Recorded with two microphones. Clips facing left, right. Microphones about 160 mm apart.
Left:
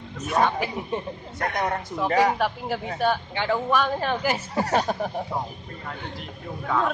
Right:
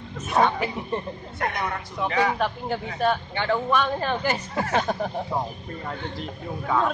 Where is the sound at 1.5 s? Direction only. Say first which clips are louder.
Left 3 dB; 45° left (ahead or behind).